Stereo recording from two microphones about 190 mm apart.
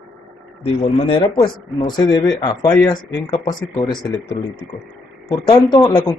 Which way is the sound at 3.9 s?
5° left (ahead or behind).